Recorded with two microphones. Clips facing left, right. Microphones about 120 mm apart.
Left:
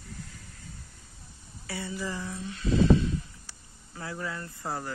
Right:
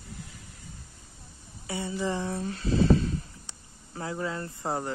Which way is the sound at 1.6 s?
25° right (ahead or behind).